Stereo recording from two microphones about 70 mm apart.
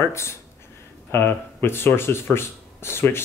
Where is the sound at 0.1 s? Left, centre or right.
Left.